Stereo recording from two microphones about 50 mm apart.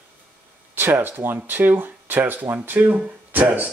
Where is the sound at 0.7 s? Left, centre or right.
Right.